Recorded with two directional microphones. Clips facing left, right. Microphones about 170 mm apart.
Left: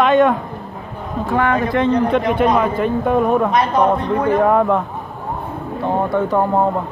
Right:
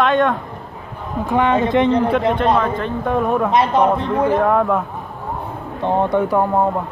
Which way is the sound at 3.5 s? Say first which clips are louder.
Right 1 dB; 25° right (ahead or behind).